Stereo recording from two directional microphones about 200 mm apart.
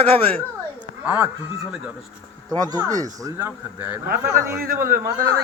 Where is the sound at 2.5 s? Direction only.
20° right (ahead or behind).